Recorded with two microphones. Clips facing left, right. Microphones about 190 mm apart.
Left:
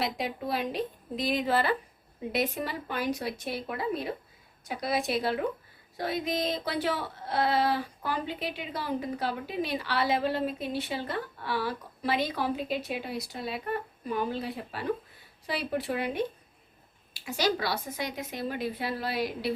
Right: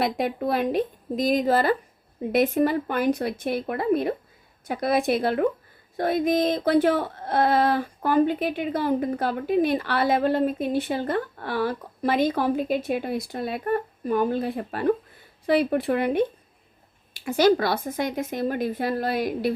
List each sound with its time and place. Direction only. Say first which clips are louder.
0.0 s speech: right 7 dB; 55° right (ahead or behind)